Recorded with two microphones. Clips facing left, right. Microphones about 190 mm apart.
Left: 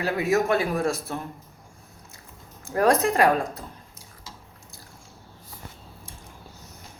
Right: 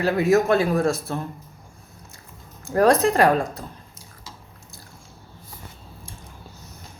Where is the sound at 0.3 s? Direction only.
35° right (ahead or behind).